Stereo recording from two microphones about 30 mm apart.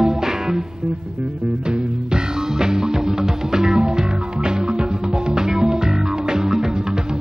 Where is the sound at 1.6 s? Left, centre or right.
Right.